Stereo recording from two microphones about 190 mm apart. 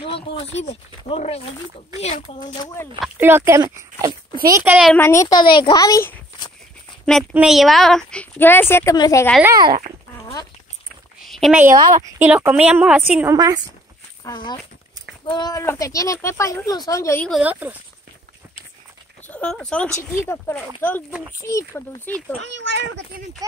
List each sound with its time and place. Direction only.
0.0 s a child's voice: 30° left (ahead or behind)
2.4 s a child's voice: 20° left (ahead or behind)
3.2 s a woman's voice: 10° right (ahead or behind)
4.9 s a child's voice: 15° left (ahead or behind)
7.1 s a woman's voice: centre (ahead or behind); by 9.2 s 20° left (ahead or behind)
9.4 s a woman's voice: 20° right (ahead or behind)
11.1 s a sound: centre (ahead or behind)
11.6 s a woman's voice: 20° right (ahead or behind)
12.0 s a woman's voice: 10° right (ahead or behind)
14.2 s a child's voice: 20° left (ahead or behind)
17.3 s a woman's voice: 10° right (ahead or behind)
19.2 s speech: 5° left (ahead or behind)
22.4 s a child's voice: 70° right (ahead or behind)